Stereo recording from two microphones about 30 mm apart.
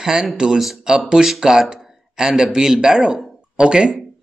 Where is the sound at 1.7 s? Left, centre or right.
Centre.